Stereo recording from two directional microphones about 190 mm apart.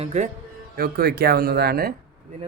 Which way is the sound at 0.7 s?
55° right (ahead or behind).